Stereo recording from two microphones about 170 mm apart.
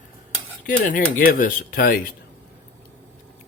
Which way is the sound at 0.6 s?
55° left (ahead or behind).